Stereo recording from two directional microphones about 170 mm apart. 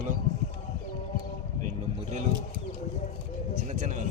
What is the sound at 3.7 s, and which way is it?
Vehicle, 45° right (ahead or behind).